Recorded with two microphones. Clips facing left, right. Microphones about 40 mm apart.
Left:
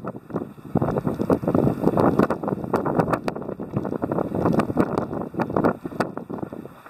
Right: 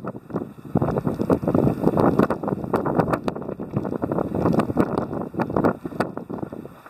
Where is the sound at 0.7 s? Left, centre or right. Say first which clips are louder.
Even; centre.